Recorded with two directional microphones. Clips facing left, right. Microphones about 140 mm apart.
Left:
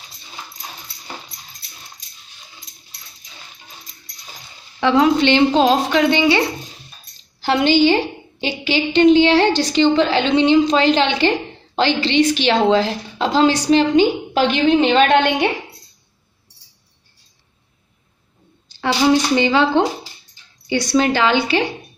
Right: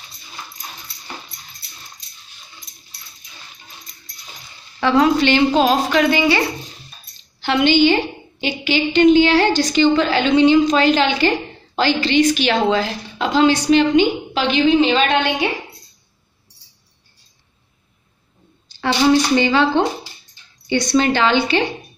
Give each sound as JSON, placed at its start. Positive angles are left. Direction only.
{"t": 4.7, "sound": "a woman's voice", "side_deg": 20}
{"t": 7.3, "sound": "a woman's voice", "side_deg": 40}
{"t": 14.5, "sound": "a woman's voice", "side_deg": 55}
{"t": 18.8, "sound": "speech", "side_deg": 15}